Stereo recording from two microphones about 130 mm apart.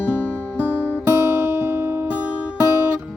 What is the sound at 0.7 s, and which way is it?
Music, 15° right (ahead or behind).